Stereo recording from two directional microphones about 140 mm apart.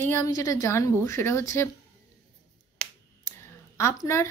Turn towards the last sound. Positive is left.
turn(degrees=20)  # may be behind; listen again after turning